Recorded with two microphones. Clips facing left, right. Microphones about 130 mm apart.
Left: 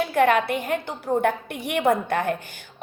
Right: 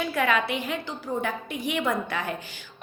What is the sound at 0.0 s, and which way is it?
A woman's voice, 55° left (ahead or behind).